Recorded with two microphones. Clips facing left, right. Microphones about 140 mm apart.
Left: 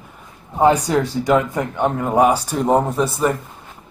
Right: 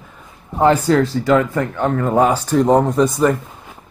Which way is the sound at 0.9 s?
10° left (ahead or behind).